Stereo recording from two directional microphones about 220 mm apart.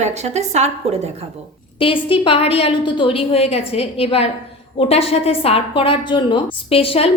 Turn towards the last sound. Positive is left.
turn(degrees=25)  # may be behind; listen again after turning